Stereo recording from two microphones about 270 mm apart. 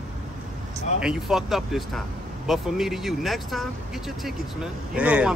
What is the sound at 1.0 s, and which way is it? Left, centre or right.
A man's voice, centre.